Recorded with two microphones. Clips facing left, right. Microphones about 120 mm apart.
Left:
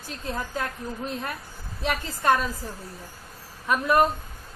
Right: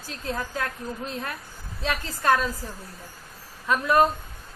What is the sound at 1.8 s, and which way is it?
Speech, 20° left (ahead or behind).